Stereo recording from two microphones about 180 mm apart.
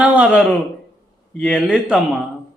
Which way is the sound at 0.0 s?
10° right (ahead or behind).